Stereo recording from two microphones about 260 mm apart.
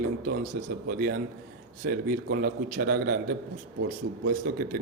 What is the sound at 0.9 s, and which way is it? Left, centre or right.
Speech, right.